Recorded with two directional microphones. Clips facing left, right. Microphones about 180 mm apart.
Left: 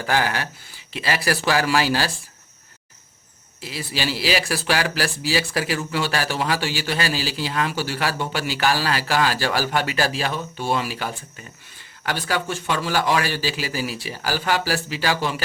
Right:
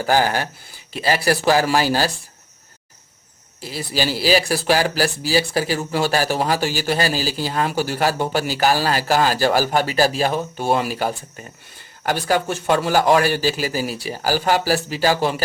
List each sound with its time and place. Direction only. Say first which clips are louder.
0.0 s speech: right 4 dB; 40° right (ahead or behind)
3.6 s speech: right 4 dB; 45° right (ahead or behind)